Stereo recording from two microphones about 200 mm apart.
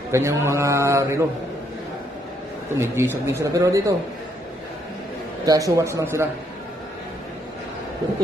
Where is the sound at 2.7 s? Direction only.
10° right (ahead or behind).